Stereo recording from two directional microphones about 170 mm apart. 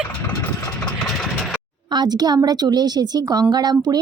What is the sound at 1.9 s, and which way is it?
A woman's voice, 25° right (ahead or behind).